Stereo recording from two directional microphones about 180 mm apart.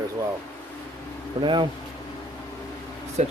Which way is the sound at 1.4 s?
25° right (ahead or behind).